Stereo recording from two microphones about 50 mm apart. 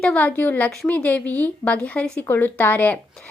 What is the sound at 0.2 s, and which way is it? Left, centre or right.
A woman's voice, left.